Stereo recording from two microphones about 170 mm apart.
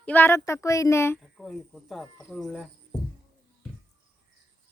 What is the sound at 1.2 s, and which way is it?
Speech, centre (ahead or behind).